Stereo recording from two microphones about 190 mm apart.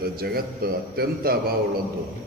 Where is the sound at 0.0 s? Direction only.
55° right (ahead or behind).